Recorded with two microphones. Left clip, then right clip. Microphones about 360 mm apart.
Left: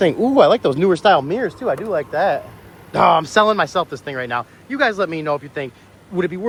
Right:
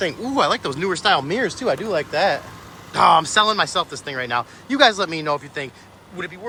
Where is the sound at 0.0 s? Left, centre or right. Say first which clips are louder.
Left 7 dB; centre.